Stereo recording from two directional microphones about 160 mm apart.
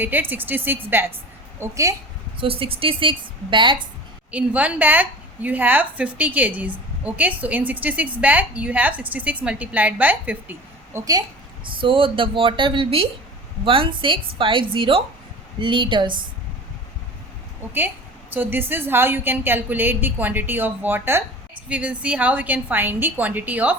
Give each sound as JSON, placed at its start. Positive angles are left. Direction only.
{"t": 0.0, "sound": "a woman's voice", "side_deg": -10}
{"t": 2.4, "sound": "speech", "side_deg": -35}
{"t": 4.3, "sound": "a woman's voice", "side_deg": -10}
{"t": 10.9, "sound": "a woman's voice", "side_deg": -20}
{"t": 11.6, "sound": "speech", "side_deg": -30}
{"t": 17.7, "sound": "a woman's voice", "side_deg": -15}